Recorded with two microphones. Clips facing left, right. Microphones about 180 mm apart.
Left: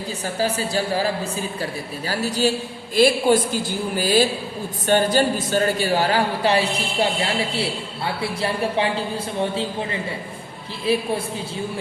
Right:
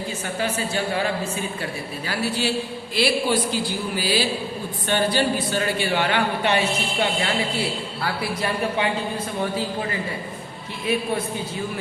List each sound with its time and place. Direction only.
0.3 s a woman's voice: 35° left (ahead or behind)